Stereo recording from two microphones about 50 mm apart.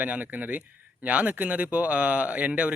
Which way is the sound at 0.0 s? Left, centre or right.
Right.